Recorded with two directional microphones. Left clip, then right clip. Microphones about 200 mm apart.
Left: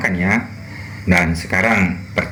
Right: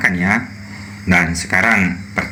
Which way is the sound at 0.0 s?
40° right (ahead or behind).